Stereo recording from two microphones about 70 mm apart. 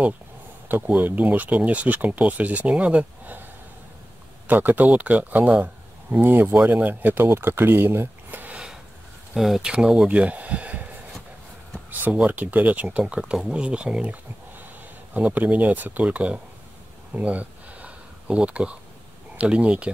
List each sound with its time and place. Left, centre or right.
0.7 s speech: right
4.5 s speech: right
9.3 s speech: centre
11.9 s speech: right
15.1 s speech: right
17.1 s a sound: right
19.3 s speech: centre